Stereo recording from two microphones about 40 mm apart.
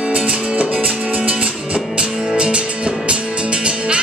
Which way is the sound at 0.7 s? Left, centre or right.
Right.